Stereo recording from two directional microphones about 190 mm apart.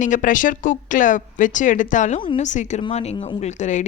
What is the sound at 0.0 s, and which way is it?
A woman's voice, 45° left (ahead or behind).